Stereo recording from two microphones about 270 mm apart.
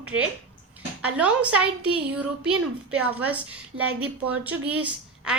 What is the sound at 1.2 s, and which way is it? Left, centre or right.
A woman's voice, centre.